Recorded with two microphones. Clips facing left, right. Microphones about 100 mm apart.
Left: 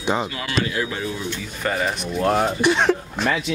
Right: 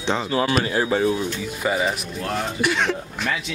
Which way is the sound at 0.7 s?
30° right (ahead or behind).